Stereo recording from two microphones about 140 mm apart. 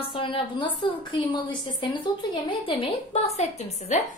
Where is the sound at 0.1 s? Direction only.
35° left (ahead or behind).